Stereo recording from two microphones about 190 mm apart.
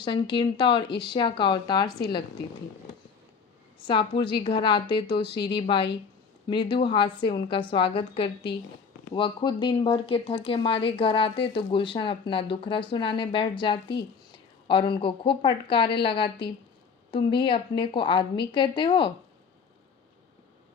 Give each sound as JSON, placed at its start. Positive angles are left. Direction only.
{"t": 0.0, "sound": "speech", "side_deg": 25}
{"t": 3.8, "sound": "a woman's voice", "side_deg": 25}